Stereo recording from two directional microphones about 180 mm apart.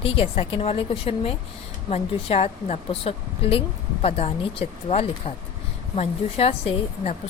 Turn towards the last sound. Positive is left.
turn(degrees=35)  # may be behind; listen again after turning